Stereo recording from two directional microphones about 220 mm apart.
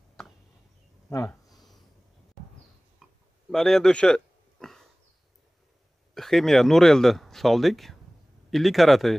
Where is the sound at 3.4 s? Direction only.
Centre (ahead or behind).